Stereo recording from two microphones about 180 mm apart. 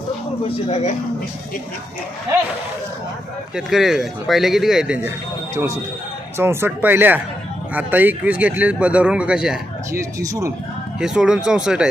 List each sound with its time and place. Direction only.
0.4 s speech: 35° left (ahead or behind)
3.5 s speech: centre (ahead or behind)
6.3 s speech: 15° right (ahead or behind)
9.9 s speech: 15° right (ahead or behind)
11.0 s speech: 5° right (ahead or behind)